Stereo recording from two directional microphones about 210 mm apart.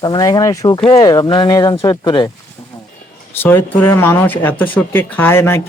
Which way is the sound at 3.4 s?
10° left (ahead or behind).